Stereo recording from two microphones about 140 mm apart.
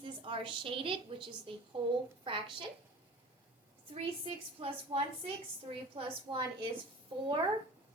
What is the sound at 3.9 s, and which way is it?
A woman's voice, 45° right (ahead or behind).